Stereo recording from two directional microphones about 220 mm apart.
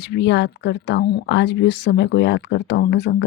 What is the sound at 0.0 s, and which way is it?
Speech, 50° left (ahead or behind).